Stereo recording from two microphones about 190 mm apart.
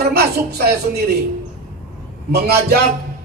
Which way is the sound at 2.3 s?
55° right (ahead or behind).